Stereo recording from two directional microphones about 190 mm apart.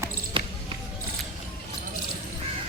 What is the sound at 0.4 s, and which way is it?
Basketball bounce, 25° right (ahead or behind).